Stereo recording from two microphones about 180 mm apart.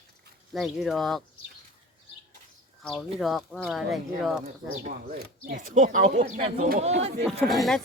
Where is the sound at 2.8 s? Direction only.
Centre (ahead or behind).